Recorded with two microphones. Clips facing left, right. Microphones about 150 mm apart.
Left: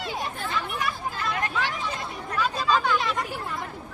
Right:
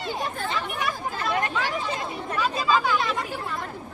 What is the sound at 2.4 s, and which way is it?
Speech, centre (ahead or behind).